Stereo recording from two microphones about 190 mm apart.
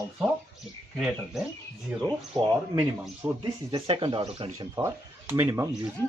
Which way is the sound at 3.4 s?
25° right (ahead or behind).